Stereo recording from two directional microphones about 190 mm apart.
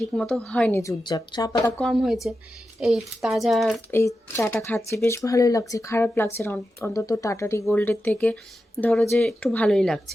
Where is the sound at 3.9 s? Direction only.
15° left (ahead or behind).